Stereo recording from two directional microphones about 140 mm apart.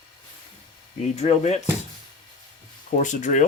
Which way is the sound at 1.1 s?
50° left (ahead or behind).